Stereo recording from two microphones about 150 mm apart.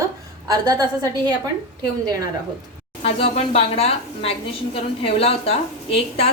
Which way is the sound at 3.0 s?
40° left (ahead or behind).